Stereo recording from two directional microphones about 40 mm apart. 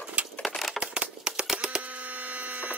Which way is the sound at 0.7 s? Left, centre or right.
Right.